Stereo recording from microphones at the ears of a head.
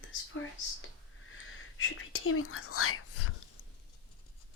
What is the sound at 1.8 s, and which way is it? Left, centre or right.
Speech, left.